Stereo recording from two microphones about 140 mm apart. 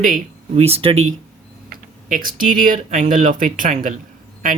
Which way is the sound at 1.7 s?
90° right.